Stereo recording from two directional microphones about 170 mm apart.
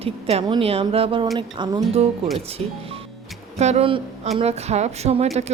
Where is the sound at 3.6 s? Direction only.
40° right (ahead or behind).